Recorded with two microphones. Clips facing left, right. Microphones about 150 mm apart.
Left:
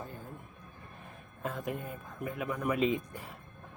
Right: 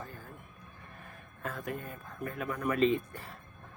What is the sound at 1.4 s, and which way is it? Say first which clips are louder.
Speech: left 2 dB; 15° left (ahead or behind).